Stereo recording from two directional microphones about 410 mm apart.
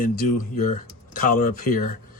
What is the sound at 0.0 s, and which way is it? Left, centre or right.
Speech, centre.